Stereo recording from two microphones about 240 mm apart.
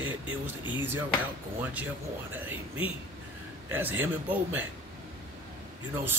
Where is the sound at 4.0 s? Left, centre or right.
Centre.